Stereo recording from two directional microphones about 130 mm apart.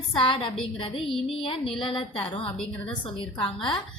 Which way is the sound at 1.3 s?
40° left (ahead or behind).